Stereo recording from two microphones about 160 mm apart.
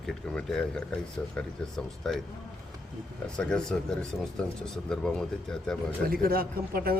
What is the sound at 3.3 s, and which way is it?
Speech, 5° left (ahead or behind).